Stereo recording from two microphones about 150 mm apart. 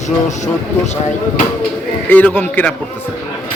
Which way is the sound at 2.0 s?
10° left (ahead or behind).